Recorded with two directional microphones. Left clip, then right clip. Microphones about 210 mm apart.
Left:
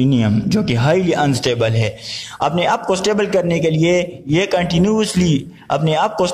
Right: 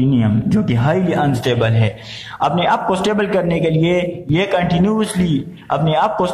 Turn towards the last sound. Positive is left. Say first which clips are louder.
# right 1 dB
turn(degrees=40)  # may be behind; listen again after turning